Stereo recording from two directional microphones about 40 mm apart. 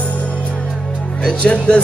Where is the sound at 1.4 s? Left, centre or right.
Left.